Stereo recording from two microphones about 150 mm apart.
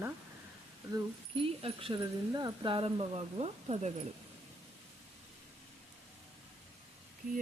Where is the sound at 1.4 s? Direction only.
35° right (ahead or behind).